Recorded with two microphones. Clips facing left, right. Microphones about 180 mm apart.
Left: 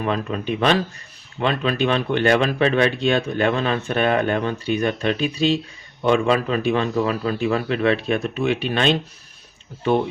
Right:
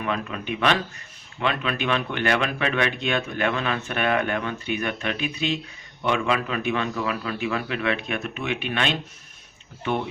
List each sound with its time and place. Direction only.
0.0 s speech: 35° left (ahead or behind)